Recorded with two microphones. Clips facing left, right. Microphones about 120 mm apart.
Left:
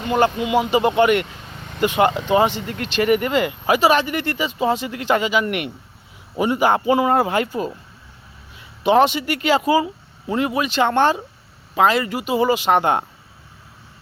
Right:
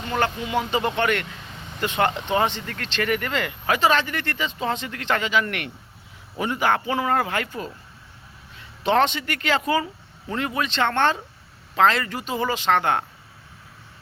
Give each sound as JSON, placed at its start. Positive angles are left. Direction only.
{"t": 0.1, "sound": "speech", "side_deg": 15}
{"t": 8.5, "sound": "speech", "side_deg": 10}